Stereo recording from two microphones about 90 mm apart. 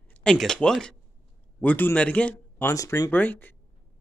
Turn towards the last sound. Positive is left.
turn(degrees=20)  # may be behind; listen again after turning